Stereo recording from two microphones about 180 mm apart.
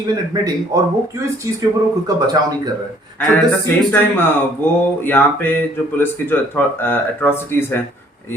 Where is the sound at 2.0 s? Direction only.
20° right (ahead or behind).